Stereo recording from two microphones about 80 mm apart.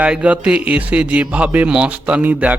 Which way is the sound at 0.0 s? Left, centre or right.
Centre.